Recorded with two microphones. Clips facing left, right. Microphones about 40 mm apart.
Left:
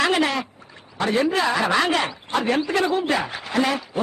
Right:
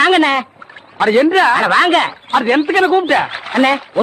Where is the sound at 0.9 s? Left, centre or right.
Right.